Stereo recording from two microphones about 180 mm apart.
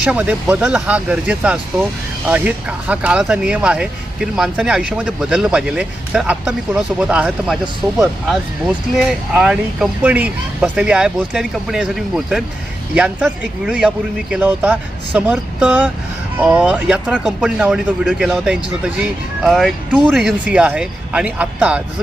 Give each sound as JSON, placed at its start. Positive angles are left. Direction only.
{"t": 0.0, "sound": "speech", "side_deg": -5}